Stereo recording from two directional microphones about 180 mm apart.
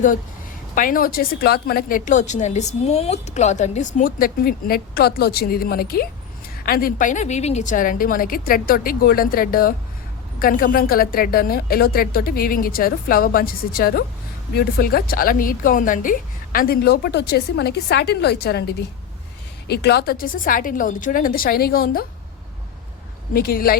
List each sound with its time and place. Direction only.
0.8 s a woman's voice: 50° left (ahead or behind)
23.3 s a woman's voice: 55° left (ahead or behind)